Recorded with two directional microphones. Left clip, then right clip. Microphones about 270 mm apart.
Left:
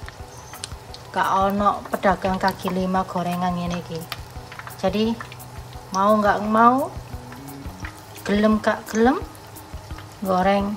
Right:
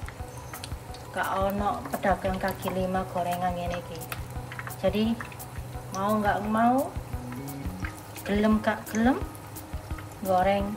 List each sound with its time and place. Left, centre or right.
1.1 s speech: centre
4.8 s speech: centre
8.2 s speech: centre
10.2 s speech: centre